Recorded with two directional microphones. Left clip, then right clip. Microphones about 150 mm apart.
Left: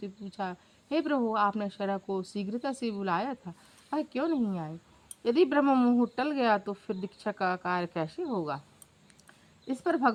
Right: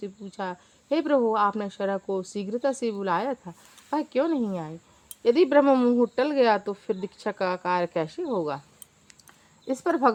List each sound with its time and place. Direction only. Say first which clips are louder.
0.0 s speech: right 3 dB; 35° left (ahead or behind)
9.6 s speech: right 5 dB; 35° left (ahead or behind)